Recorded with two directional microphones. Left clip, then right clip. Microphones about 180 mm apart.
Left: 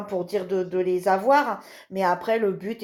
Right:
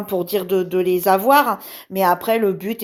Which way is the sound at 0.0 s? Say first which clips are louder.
Right 5 dB; 50° right (ahead or behind).